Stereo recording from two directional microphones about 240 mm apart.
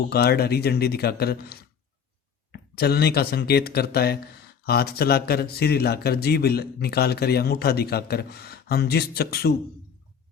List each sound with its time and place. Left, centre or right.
0.1 s speech: left